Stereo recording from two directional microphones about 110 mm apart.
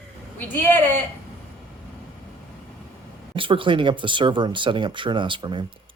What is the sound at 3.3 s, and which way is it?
Speech, 50° right (ahead or behind).